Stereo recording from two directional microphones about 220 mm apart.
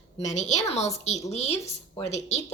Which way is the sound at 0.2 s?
30° left (ahead or behind).